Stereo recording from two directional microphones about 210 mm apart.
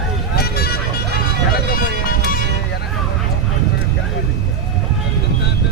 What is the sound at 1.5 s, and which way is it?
Music, 45° left (ahead or behind).